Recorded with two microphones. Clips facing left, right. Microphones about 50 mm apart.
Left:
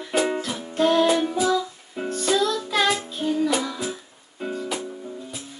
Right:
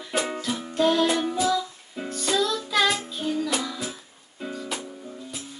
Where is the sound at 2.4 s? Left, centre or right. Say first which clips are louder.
Left 1 dB; left.